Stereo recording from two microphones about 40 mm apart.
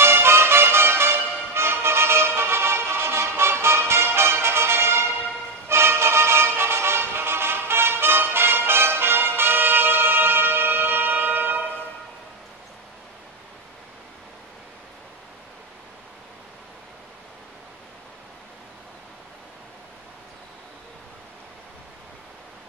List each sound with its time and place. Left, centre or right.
0.0 s music: right